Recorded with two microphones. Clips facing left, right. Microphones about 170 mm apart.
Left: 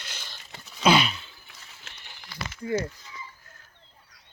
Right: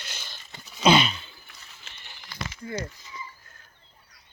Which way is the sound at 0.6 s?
5° left (ahead or behind).